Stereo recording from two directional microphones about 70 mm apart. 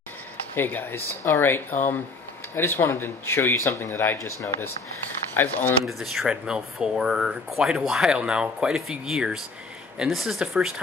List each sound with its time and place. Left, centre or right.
0.6 s speech: left
5.3 s speech: left
5.9 s speech: centre